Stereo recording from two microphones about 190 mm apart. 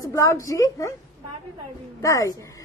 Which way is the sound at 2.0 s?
15° left (ahead or behind).